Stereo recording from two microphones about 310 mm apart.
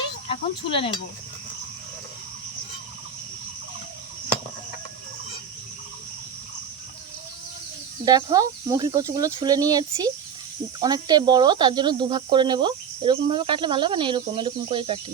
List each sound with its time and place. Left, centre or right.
0.3 s cricket: centre
8.0 s speech: centre